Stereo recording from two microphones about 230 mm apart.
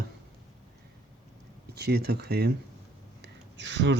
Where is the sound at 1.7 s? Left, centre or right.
Right.